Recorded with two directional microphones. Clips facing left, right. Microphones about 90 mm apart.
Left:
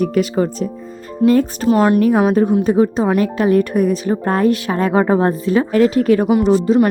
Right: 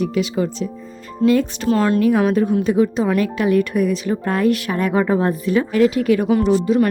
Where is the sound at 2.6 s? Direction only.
35° left (ahead or behind).